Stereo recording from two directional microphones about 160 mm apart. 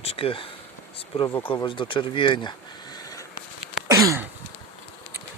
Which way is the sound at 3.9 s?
20° right (ahead or behind).